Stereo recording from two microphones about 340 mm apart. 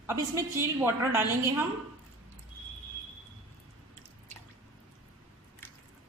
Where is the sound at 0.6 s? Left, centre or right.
Centre.